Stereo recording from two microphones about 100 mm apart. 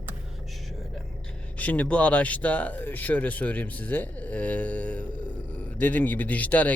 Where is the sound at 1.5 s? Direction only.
15° left (ahead or behind).